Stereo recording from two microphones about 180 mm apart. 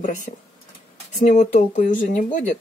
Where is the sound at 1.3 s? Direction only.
40° left (ahead or behind).